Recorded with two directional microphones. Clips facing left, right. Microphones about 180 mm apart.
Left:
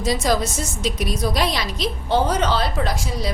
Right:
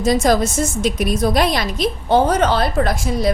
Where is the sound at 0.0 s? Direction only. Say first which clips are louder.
Right 5 dB; 50° right (ahead or behind).